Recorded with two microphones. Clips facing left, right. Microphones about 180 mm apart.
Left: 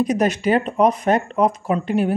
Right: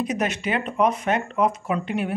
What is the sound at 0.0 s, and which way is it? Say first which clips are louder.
Speech: left 7 dB; 40° left (ahead or behind).